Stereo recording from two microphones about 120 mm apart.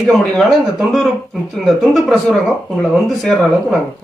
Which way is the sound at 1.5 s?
Centre (ahead or behind).